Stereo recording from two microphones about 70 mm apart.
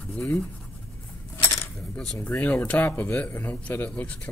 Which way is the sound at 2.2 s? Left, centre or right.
Left.